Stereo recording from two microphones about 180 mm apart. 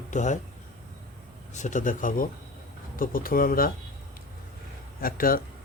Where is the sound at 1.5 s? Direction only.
40° left (ahead or behind).